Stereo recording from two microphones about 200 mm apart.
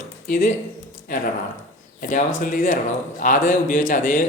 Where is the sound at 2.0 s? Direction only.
40° left (ahead or behind).